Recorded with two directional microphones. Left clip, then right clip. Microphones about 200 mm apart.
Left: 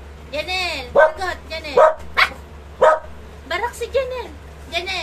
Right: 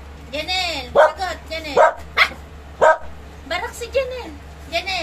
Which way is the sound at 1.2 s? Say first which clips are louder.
Even; 25° left (ahead or behind).